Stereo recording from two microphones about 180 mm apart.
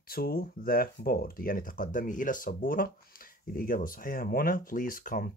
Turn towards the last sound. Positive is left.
turn(degrees=50)  # may be behind; listen again after turning